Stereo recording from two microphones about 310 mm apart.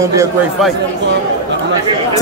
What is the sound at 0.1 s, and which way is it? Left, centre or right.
Speech, centre.